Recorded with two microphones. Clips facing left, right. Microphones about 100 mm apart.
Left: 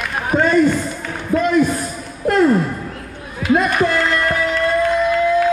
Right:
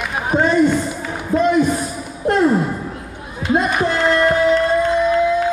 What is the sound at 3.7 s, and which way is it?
Music, 10° right (ahead or behind).